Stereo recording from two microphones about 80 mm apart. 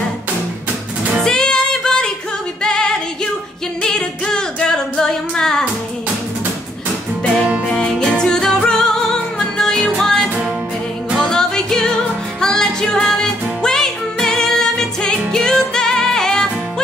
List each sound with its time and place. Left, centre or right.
1.2 s music: centre
3.8 s singing: centre
7.7 s music: centre